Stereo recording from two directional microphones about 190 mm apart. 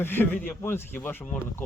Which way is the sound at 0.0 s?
10° left (ahead or behind).